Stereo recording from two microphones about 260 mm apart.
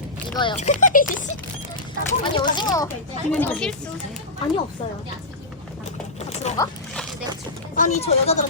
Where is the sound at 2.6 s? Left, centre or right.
Centre.